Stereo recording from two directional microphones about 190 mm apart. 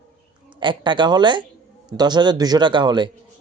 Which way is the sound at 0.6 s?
25° right (ahead or behind).